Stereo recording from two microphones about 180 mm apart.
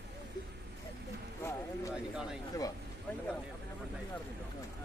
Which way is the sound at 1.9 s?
5° right (ahead or behind).